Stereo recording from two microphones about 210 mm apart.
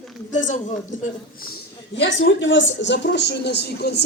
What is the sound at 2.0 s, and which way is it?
Speech, 60° left (ahead or behind).